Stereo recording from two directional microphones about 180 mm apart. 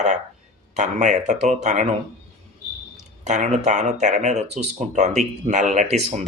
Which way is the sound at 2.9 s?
40° right (ahead or behind).